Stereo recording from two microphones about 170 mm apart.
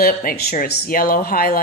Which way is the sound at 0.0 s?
60° left (ahead or behind).